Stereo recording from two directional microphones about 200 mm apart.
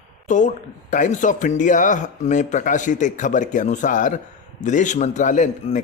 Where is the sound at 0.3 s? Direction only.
40° left (ahead or behind).